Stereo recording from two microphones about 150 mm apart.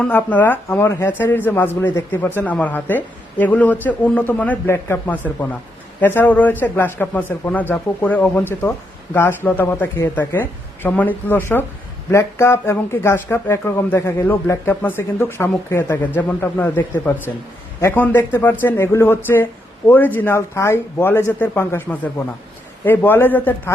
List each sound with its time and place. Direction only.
0.0 s speech: 10° left (ahead or behind)